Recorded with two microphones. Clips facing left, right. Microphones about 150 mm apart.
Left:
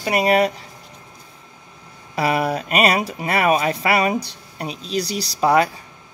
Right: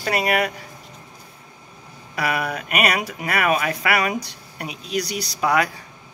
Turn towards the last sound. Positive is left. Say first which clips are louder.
# left 4 dB
turn(degrees=30)  # may be behind; listen again after turning